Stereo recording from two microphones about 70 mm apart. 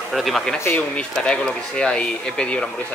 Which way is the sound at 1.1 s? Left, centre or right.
Centre.